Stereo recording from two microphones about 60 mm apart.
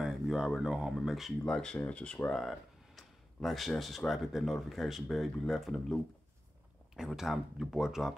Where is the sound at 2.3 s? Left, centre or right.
Centre.